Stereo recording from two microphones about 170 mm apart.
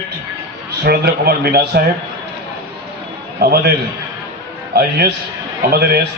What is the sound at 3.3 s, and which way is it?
Speech, 65° right (ahead or behind).